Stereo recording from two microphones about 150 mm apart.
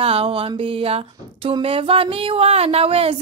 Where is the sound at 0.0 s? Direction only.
40° right (ahead or behind).